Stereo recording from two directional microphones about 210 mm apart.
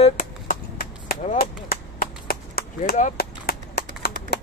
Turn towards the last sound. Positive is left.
turn(degrees=50)  # may be behind; listen again after turning